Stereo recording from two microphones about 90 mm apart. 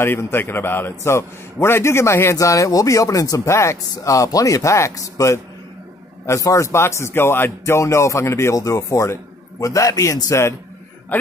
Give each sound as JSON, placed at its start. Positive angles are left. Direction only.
{"t": 0.0, "sound": "a man's voice", "side_deg": 25}